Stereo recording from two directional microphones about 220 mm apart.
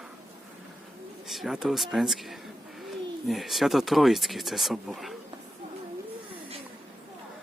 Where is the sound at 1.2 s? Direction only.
Centre (ahead or behind).